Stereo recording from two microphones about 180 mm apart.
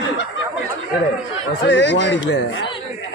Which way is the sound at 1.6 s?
80° left.